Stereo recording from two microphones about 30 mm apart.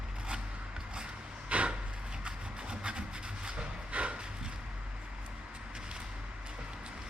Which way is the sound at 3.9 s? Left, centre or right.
Right.